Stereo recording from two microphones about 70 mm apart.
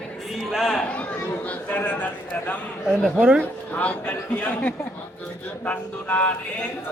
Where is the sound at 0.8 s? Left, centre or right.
Centre.